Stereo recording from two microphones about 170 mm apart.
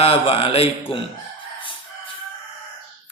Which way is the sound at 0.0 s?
35° left (ahead or behind).